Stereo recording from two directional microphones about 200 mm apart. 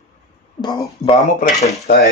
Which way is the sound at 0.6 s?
20° left (ahead or behind).